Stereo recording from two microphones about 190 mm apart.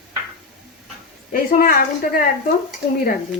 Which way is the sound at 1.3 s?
50° left (ahead or behind).